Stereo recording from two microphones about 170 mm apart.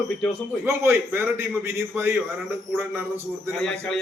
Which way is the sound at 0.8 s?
15° right (ahead or behind).